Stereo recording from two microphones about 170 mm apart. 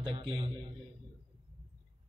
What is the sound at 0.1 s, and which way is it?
Speech, 25° right (ahead or behind).